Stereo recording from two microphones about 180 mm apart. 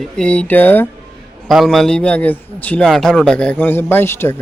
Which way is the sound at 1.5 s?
Centre (ahead or behind).